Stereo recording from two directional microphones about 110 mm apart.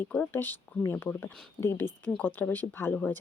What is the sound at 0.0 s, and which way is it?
Speech, 15° left (ahead or behind).